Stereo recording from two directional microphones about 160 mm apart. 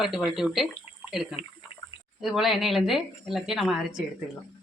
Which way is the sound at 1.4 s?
35° left (ahead or behind).